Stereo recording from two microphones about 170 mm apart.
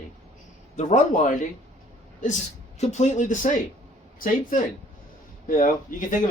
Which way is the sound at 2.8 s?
40° left (ahead or behind).